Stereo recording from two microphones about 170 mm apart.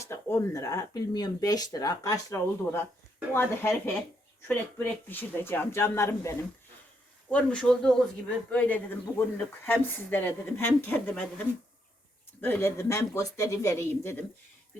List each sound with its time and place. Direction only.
0.0 s a man's voice: 15° left (ahead or behind)
12.4 s a man's voice: 15° left (ahead or behind)